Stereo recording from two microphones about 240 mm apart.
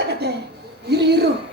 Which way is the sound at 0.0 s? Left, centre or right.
Right.